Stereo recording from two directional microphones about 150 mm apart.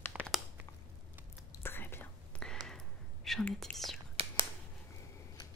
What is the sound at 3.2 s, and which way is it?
Whispering, 5° left (ahead or behind).